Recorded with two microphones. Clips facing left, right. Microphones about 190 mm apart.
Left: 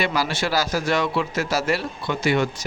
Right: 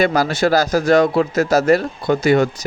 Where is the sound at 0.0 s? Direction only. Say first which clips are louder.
Right 8 dB; 45° right (ahead or behind).